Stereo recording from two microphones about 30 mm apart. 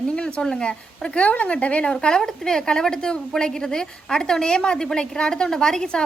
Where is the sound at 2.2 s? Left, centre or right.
Centre.